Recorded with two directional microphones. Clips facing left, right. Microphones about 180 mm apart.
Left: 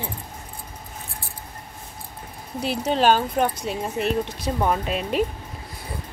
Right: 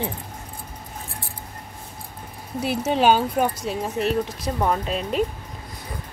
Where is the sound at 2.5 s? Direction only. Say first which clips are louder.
Right 1 dB; 5° right (ahead or behind).